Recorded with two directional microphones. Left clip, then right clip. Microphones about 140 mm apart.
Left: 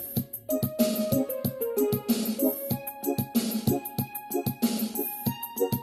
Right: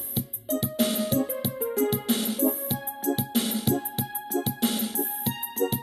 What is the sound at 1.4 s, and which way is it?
Music, centre (ahead or behind).